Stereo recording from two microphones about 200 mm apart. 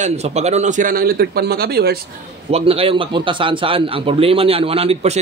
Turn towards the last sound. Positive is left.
turn(degrees=-30)  # may be behind; listen again after turning